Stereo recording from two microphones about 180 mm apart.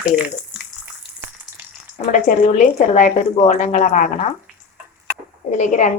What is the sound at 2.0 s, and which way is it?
Speech, 45° left (ahead or behind).